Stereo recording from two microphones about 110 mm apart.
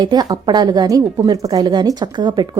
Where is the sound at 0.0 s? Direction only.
40° right (ahead or behind).